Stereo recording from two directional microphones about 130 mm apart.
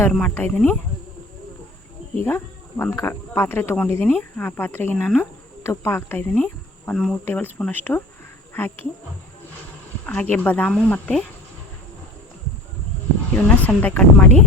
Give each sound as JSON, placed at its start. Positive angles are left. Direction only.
{"t": 0.1, "sound": "speech", "side_deg": 10}
{"t": 2.2, "sound": "speech", "side_deg": 15}
{"t": 5.6, "sound": "speech", "side_deg": 20}
{"t": 10.1, "sound": "speech", "side_deg": 10}
{"t": 13.3, "sound": "speech", "side_deg": 15}